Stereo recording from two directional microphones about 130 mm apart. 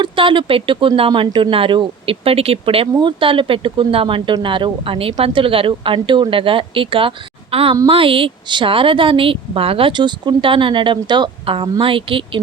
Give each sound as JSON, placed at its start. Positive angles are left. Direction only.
{"t": 0.0, "sound": "a woman's voice", "side_deg": -40}